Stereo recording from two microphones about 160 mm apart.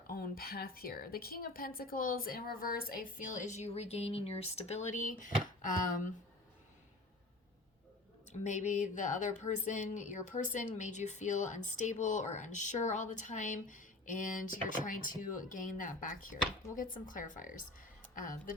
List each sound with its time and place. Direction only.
0.1 s a woman's voice: 70° left (ahead or behind)
8.3 s speech: 50° left (ahead or behind)